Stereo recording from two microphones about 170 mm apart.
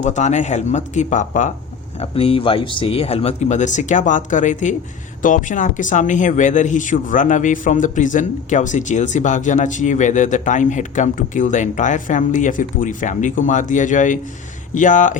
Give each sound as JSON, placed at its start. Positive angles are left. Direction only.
{"t": 0.0, "sound": "speech", "side_deg": 45}
{"t": 2.0, "sound": "speech", "side_deg": 35}